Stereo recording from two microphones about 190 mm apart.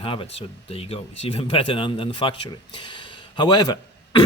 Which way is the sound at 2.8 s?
25° left (ahead or behind).